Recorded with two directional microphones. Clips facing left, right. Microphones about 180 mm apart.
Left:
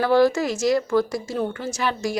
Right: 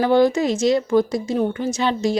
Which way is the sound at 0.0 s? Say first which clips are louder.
Right 2 dB; 20° right (ahead or behind).